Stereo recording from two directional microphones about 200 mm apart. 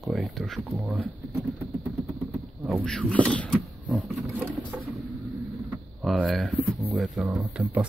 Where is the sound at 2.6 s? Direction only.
Centre (ahead or behind).